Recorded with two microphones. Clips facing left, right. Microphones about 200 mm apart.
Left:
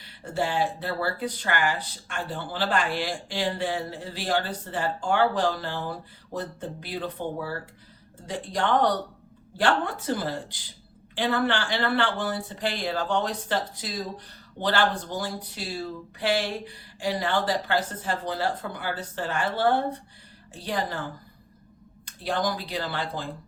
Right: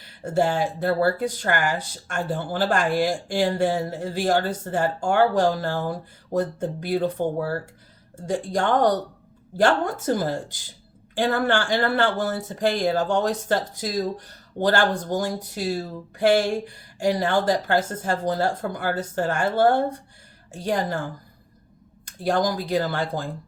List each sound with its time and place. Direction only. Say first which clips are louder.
0.0 s speech: right 7 dB; 45° right (ahead or behind)
22.0 s speech: right 5 dB; 45° right (ahead or behind)